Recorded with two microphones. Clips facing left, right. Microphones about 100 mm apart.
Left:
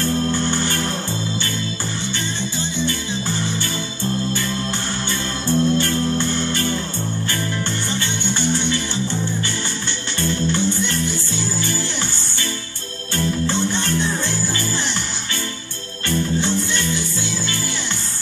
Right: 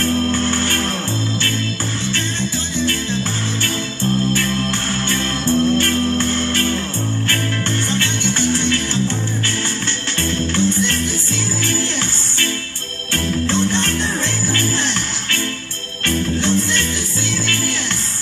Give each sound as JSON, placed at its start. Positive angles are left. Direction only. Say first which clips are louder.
{"t": 0.2, "sound": "music", "louder": "right 2 dB", "side_deg": 15}
{"t": 4.4, "sound": "music", "louder": "right 4 dB", "side_deg": 15}
{"t": 8.0, "sound": "music", "louder": "right 3 dB", "side_deg": 15}
{"t": 10.2, "sound": "music", "louder": "even", "side_deg": 15}
{"t": 13.1, "sound": "music", "louder": "right 2 dB", "side_deg": 15}
{"t": 16.1, "sound": "music", "louder": "right 2 dB", "side_deg": 15}